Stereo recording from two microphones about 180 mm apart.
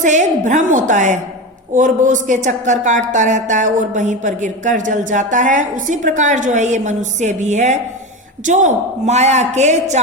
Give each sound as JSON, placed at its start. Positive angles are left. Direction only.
{"t": 0.0, "sound": "a woman's voice", "side_deg": -45}